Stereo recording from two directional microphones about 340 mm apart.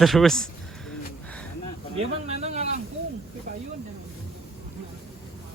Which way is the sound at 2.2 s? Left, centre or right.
Centre.